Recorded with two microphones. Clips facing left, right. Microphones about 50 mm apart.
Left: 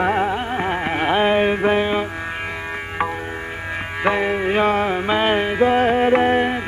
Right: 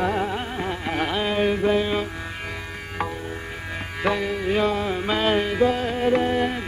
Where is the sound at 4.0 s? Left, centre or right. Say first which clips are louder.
Left 5 dB; left.